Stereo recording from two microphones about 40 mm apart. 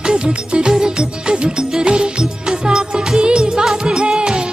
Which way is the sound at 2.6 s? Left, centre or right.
Centre.